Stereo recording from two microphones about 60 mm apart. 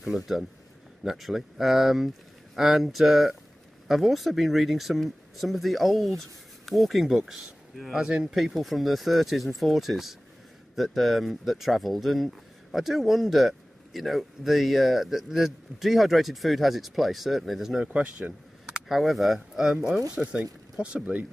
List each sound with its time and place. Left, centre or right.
0.0 s speech: centre
8.4 s speech: centre
17.9 s speech: right
18.7 s speech: centre
20.2 s speech: centre